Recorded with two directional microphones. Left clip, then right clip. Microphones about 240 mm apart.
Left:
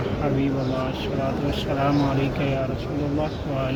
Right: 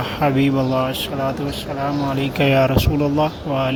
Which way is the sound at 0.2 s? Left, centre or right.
Right.